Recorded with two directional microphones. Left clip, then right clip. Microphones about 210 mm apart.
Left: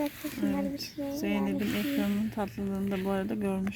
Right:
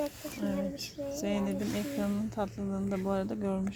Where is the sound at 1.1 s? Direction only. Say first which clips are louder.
Left 1 dB; 10° left (ahead or behind).